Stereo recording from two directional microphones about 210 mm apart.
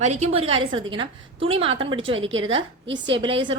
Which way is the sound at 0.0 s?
30° right (ahead or behind).